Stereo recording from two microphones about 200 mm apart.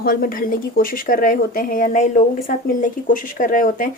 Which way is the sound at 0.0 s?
45° left (ahead or behind).